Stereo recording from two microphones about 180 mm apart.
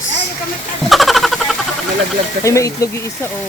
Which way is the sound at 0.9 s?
Centre (ahead or behind).